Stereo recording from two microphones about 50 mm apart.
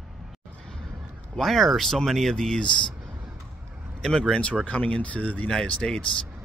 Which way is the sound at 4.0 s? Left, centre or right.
Centre.